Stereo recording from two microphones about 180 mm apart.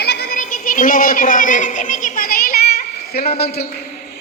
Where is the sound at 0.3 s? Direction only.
45° left (ahead or behind).